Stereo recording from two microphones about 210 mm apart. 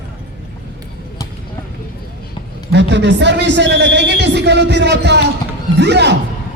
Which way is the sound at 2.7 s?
55° right (ahead or behind).